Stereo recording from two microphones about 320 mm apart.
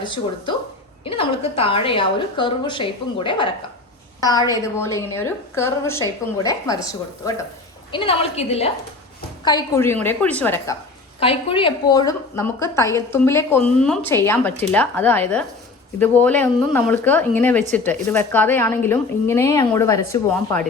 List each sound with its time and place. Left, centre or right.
0.0 s a woman's voice: centre
11.2 s a woman's voice: centre